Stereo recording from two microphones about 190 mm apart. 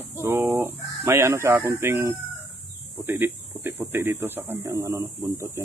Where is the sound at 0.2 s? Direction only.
15° right (ahead or behind).